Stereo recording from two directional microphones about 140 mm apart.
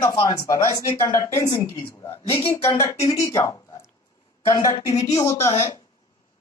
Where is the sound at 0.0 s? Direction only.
30° left (ahead or behind).